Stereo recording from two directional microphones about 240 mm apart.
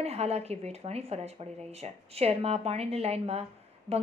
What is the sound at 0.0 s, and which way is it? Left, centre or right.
A woman's voice, right.